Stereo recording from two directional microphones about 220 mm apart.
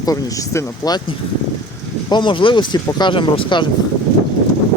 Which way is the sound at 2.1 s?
20° left (ahead or behind).